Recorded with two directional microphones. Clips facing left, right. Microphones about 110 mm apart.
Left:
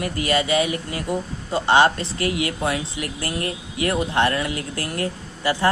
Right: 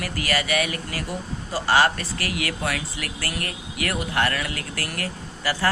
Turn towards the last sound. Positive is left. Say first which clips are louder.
# left 4 dB
turn(degrees=25)  # may be behind; listen again after turning